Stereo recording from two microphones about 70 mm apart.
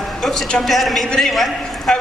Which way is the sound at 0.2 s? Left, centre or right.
Centre.